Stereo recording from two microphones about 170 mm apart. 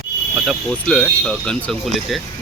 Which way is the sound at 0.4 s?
5° left (ahead or behind).